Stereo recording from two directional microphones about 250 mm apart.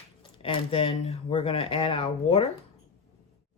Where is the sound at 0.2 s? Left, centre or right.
Left.